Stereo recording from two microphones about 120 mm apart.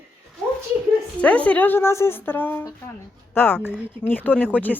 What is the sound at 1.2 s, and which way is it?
Speech, 10° left (ahead or behind).